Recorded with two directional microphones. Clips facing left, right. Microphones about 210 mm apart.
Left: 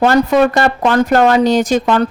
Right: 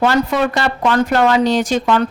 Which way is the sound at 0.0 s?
45° left (ahead or behind).